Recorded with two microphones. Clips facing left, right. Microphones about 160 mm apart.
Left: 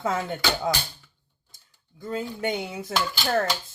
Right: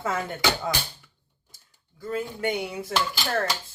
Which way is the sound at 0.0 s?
20° left (ahead or behind).